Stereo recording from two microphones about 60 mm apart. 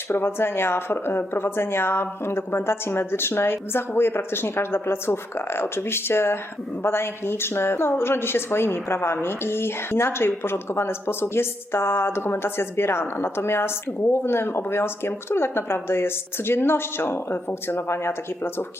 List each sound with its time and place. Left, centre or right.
0.1 s speech: left